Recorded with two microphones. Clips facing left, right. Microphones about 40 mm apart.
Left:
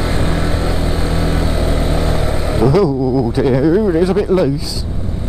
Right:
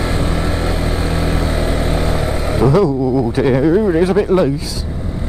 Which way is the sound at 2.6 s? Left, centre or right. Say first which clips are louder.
Even; right.